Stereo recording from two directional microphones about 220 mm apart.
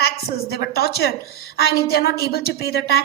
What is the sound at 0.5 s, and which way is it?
A woman's voice, 45° left (ahead or behind).